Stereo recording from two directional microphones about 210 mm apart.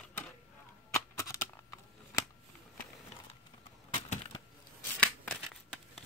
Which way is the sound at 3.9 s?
30° left (ahead or behind).